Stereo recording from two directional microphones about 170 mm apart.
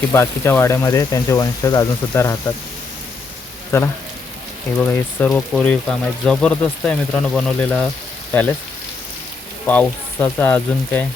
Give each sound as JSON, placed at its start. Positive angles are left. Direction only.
{"t": 0.1, "sound": "speech", "side_deg": 15}
{"t": 3.7, "sound": "speech", "side_deg": 15}
{"t": 9.6, "sound": "speech", "side_deg": 10}